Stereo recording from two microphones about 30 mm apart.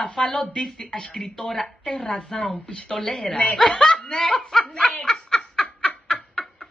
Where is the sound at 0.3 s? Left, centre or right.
Left.